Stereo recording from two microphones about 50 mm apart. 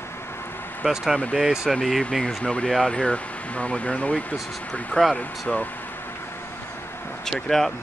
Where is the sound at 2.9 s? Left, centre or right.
Left.